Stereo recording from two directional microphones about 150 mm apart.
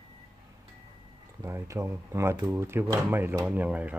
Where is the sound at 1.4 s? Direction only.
20° right (ahead or behind).